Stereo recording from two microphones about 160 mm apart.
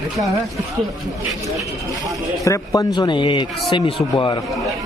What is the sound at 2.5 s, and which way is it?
Speech, 20° left (ahead or behind).